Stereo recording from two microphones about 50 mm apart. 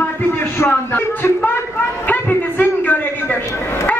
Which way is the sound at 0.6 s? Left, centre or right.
Left.